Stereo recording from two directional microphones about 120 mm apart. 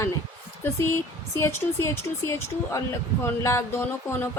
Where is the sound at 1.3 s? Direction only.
20° left (ahead or behind).